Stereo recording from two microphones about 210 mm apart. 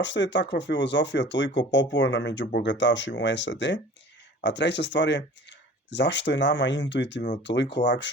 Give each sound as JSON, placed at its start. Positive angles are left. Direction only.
{"t": 0.0, "sound": "speech", "side_deg": 60}